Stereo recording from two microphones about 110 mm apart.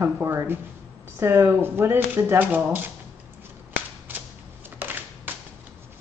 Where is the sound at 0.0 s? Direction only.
25° right (ahead or behind).